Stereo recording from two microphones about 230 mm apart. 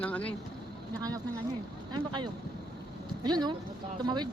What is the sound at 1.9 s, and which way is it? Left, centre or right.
Speech, centre.